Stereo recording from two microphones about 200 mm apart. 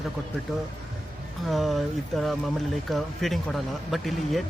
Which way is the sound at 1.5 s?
Centre (ahead or behind).